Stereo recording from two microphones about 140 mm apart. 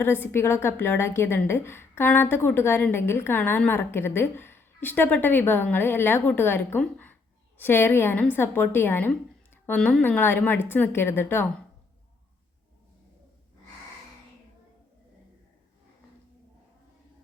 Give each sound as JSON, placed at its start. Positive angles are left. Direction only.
{"t": 0.0, "sound": "a woman's voice", "side_deg": 15}